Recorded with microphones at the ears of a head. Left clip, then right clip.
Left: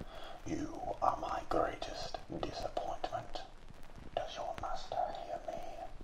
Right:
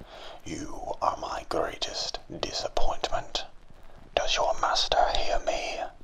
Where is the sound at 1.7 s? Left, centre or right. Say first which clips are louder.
Right 10 dB; right.